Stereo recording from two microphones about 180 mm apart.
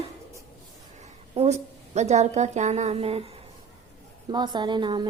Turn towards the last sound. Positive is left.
turn(degrees=-25)  # may be behind; listen again after turning